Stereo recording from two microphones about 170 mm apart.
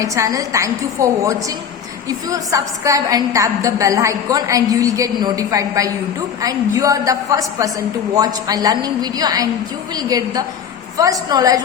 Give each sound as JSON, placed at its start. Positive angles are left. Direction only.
{"t": 0.0, "sound": "a woman's voice", "side_deg": -20}